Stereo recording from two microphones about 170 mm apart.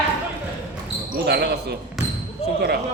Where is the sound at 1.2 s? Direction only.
70° right (ahead or behind).